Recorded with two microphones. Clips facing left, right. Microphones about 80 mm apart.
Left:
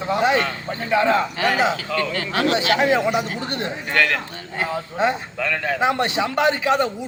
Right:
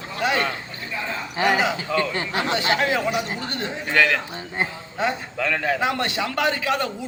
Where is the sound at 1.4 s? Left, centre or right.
Centre.